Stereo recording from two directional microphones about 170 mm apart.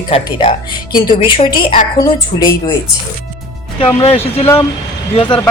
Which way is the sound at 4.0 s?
35° left (ahead or behind).